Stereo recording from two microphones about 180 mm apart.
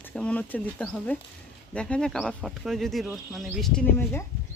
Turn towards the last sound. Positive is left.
turn(degrees=15)  # may be behind; listen again after turning